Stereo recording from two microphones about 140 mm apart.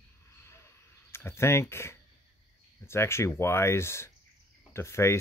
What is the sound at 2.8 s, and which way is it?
Speech, 20° left (ahead or behind).